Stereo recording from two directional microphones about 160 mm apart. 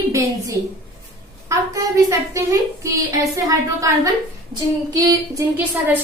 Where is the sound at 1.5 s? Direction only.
20° right (ahead or behind).